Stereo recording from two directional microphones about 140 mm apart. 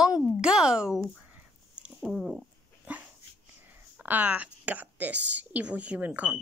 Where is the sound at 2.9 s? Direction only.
10° right (ahead or behind).